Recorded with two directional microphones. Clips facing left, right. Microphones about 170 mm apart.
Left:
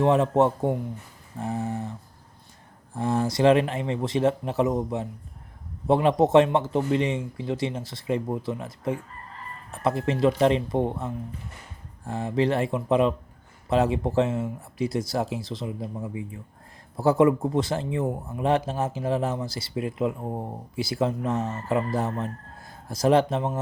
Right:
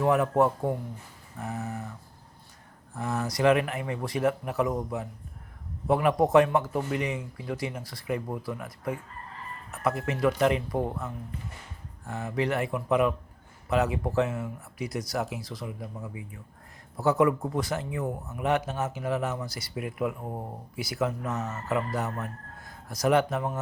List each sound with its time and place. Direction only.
0.0 s speech: 25° left (ahead or behind)